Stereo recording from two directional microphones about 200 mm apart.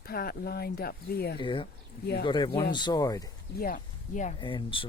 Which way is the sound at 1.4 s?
25° left (ahead or behind).